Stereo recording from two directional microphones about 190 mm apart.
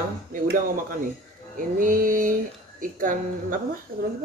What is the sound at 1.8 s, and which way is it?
Speech, 45° right (ahead or behind).